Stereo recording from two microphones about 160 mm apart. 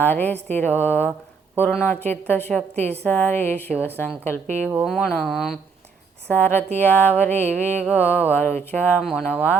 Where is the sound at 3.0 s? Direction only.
10° left (ahead or behind).